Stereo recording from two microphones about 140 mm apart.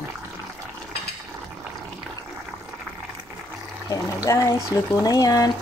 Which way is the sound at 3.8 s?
25° left (ahead or behind).